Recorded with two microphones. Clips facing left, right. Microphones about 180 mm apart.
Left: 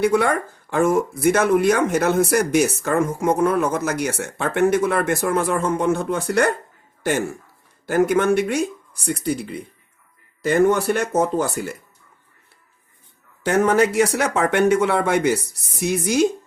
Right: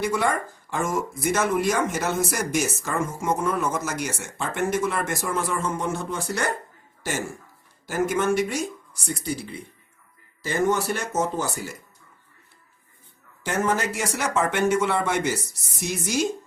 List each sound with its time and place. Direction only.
0.0 s speech: 60° left (ahead or behind)
13.4 s speech: 65° left (ahead or behind)